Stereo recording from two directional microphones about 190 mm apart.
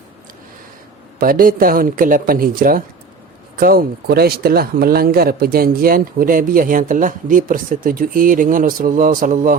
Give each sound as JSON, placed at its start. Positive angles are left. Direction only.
{"t": 1.2, "sound": "speech", "side_deg": -50}